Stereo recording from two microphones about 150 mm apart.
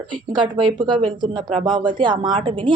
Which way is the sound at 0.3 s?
30° right (ahead or behind).